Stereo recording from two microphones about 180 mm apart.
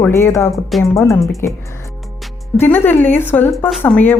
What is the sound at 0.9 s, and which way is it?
A woman's voice, 15° left (ahead or behind).